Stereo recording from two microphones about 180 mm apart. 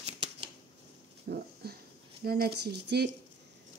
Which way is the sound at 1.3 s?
60° right (ahead or behind).